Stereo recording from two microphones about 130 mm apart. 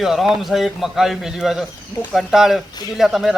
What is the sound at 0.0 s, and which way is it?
Speech, 5° right (ahead or behind).